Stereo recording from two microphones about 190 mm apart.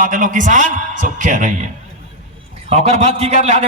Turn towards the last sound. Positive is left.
turn(degrees=-35)  # may be behind; listen again after turning